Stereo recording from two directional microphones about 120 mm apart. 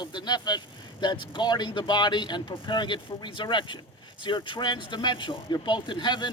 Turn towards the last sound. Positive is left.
turn(degrees=40)  # may be behind; listen again after turning